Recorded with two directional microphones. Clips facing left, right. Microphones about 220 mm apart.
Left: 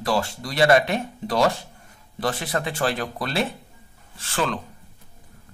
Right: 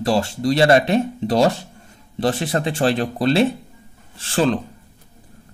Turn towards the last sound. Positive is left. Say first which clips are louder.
# right 7 dB
turn(degrees=-30)  # may be behind; listen again after turning